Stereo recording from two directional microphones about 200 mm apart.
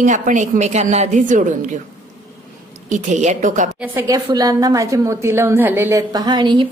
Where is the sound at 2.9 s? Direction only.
35° right (ahead or behind).